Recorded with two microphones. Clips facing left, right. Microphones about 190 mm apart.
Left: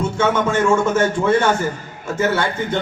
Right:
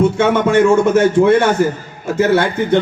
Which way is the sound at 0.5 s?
70° right (ahead or behind).